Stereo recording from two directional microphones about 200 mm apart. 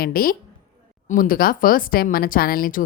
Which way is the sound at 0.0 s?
45° left (ahead or behind).